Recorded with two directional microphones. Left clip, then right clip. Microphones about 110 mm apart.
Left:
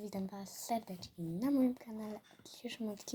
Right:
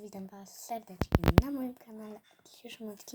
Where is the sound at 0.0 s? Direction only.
Centre (ahead or behind).